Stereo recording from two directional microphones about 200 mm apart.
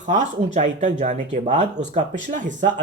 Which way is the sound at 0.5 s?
35° right (ahead or behind).